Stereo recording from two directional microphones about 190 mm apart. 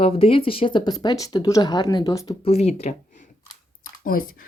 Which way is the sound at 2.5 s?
35° left (ahead or behind).